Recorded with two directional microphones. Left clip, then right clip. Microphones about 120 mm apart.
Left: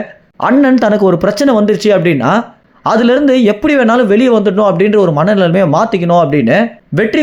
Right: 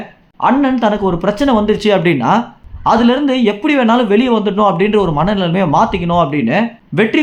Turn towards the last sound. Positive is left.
turn(degrees=40)  # may be behind; listen again after turning